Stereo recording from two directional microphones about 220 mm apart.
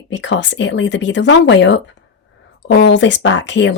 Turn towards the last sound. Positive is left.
turn(degrees=55)  # may be behind; listen again after turning